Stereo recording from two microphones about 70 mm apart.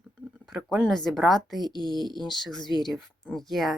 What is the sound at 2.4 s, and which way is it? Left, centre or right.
Speech, centre.